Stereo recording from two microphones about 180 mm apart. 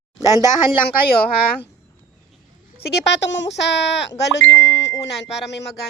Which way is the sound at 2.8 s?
65° left (ahead or behind).